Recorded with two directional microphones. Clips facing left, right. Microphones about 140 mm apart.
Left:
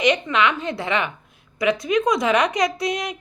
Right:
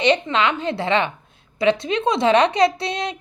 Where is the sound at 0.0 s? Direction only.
30° right (ahead or behind).